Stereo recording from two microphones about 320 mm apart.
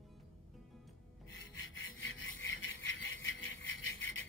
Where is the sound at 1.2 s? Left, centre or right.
Left.